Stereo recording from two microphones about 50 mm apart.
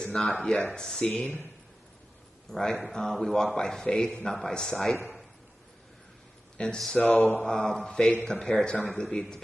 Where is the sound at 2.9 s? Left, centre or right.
Centre.